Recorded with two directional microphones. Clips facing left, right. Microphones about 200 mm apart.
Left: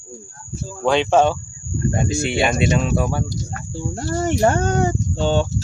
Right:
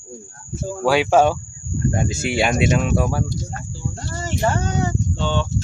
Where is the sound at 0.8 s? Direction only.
5° right (ahead or behind).